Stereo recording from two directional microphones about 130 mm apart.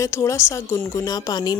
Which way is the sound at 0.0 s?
25° left (ahead or behind).